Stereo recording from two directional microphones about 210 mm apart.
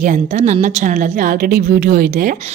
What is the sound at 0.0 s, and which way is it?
A woman's voice, 35° right (ahead or behind).